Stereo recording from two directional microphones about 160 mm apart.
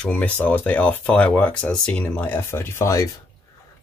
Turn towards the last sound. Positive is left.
turn(degrees=20)  # may be behind; listen again after turning